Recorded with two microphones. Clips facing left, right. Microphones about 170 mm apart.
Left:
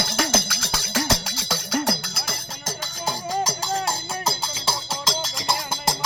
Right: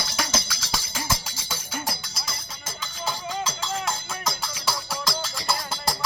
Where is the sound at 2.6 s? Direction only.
45° left (ahead or behind); by 5.9 s 20° left (ahead or behind).